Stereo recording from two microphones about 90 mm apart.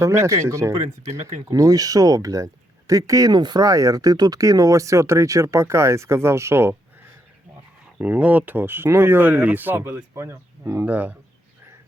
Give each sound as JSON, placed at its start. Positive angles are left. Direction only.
{"t": 0.0, "sound": "speech", "side_deg": -30}
{"t": 7.9, "sound": "speech", "side_deg": -15}
{"t": 10.8, "sound": "speech", "side_deg": -15}